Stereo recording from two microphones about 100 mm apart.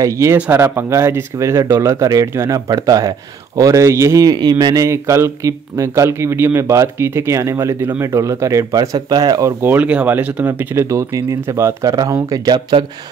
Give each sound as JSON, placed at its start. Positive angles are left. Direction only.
{"t": 0.0, "sound": "speech", "side_deg": -30}
{"t": 4.8, "sound": "speech", "side_deg": -30}
{"t": 9.6, "sound": "speech", "side_deg": -15}